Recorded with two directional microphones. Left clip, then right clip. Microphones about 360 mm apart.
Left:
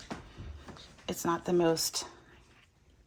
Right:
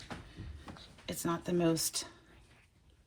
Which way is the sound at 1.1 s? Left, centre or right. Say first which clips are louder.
Left 5 dB; left.